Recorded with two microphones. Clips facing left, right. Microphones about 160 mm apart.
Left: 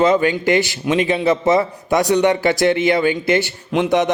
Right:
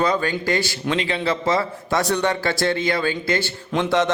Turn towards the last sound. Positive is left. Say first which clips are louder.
# left 3 dB
turn(degrees=20)  # may be behind; listen again after turning